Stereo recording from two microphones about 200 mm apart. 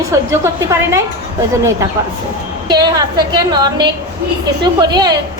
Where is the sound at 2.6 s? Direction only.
20° right (ahead or behind).